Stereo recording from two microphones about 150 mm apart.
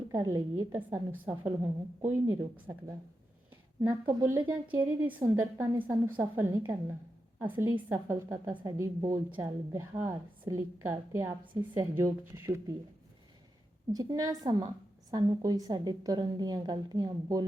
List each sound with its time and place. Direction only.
0.1 s a woman's voice: 25° right (ahead or behind)
2.2 s speech: 30° right (ahead or behind)
3.8 s a woman's voice: 15° right (ahead or behind)
13.9 s a woman's voice: 25° right (ahead or behind)